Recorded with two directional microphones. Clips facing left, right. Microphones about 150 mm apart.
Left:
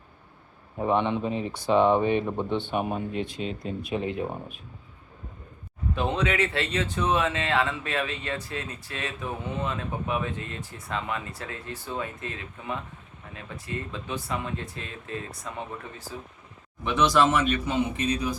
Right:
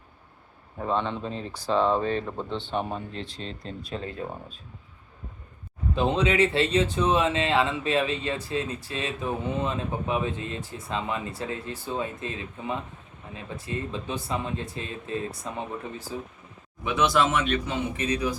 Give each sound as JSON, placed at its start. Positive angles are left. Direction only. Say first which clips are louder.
{"t": 0.8, "sound": "speech", "louder": "left 3 dB", "side_deg": 15}
{"t": 5.9, "sound": "speech", "louder": "right 3 dB", "side_deg": -25}
{"t": 16.8, "sound": "speech", "louder": "left 1 dB", "side_deg": 0}